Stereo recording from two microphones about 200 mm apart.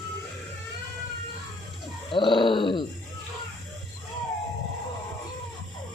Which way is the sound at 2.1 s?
25° left (ahead or behind).